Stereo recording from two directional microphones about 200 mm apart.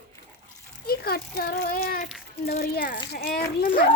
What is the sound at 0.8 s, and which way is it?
A child's voice, 50° left (ahead or behind).